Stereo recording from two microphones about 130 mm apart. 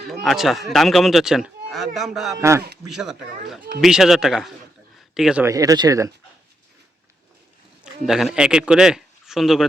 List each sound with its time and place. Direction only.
0.1 s speech: centre (ahead or behind)
2.4 s speech: 20° right (ahead or behind)
2.8 s speech: 5° right (ahead or behind)
5.4 s speech: 25° right (ahead or behind)
8.0 s speech: 5° right (ahead or behind)